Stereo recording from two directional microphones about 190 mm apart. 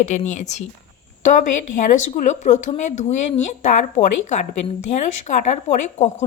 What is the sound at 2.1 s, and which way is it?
Speech, 40° left (ahead or behind).